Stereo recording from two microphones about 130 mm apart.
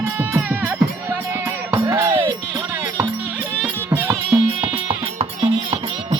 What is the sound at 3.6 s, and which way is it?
Music, 20° right (ahead or behind).